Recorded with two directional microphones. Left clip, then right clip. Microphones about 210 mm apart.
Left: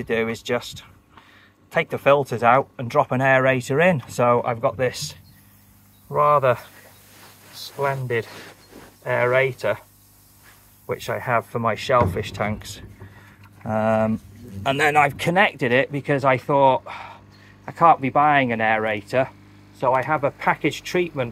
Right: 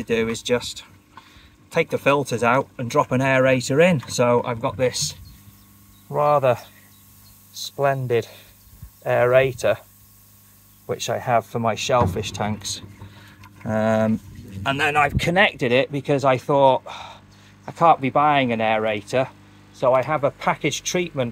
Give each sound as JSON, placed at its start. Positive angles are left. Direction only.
{"t": 0.0, "sound": "speech", "side_deg": 0}
{"t": 6.1, "sound": "speech", "side_deg": -10}
{"t": 7.8, "sound": "speech", "side_deg": -20}
{"t": 10.9, "sound": "speech", "side_deg": -15}
{"t": 13.7, "sound": "speech", "side_deg": -10}
{"t": 14.8, "sound": "speech", "side_deg": 15}